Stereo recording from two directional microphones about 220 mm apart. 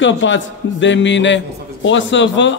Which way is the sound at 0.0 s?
55° left (ahead or behind).